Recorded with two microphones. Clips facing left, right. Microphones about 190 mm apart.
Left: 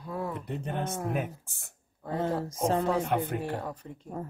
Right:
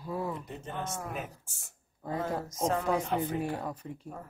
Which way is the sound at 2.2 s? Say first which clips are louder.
Left 3 dB; 30° left (ahead or behind).